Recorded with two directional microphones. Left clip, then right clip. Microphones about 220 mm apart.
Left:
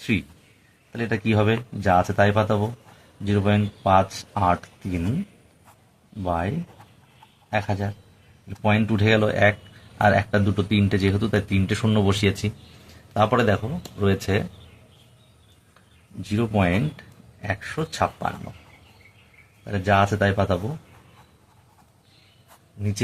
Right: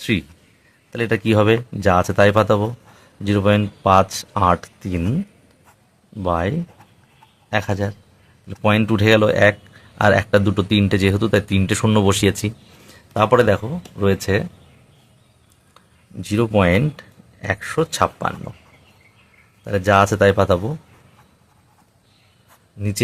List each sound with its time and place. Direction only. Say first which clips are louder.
0.0 s speech: right 4 dB; 45° right (ahead or behind)
6.2 s speech: right 5 dB; 45° right (ahead or behind)
7.5 s speech: right 4 dB; 45° right (ahead or behind)
16.3 s speech: right 7 dB; 50° right (ahead or behind)
19.6 s speech: right 5 dB; 45° right (ahead or behind)